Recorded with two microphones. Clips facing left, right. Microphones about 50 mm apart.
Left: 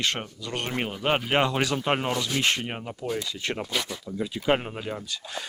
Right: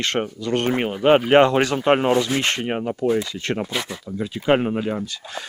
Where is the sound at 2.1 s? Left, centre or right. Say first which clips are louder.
Right 6 dB; right.